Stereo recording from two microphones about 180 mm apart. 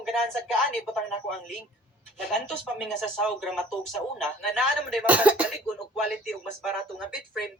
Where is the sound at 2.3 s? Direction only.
Centre (ahead or behind).